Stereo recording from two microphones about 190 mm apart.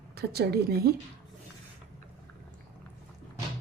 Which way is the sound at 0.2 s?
55° right (ahead or behind).